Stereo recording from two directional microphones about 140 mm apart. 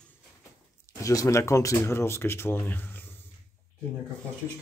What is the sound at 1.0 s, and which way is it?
Speech, 20° left (ahead or behind).